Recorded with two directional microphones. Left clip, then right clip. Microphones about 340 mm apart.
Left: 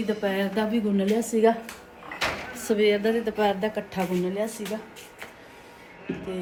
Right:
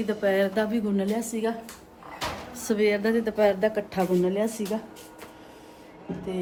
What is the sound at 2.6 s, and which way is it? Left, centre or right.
A woman's voice, centre.